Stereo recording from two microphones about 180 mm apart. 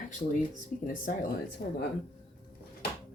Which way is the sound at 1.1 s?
45° left (ahead or behind).